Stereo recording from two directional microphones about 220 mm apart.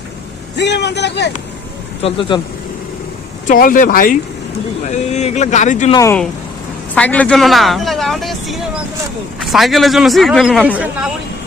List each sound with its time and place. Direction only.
0.5 s speech: 50° left (ahead or behind)
2.0 s speech: 25° left (ahead or behind)
3.4 s speech: 40° left (ahead or behind)
5.9 s speech: 15° left (ahead or behind); by 11.1 s 5° right (ahead or behind)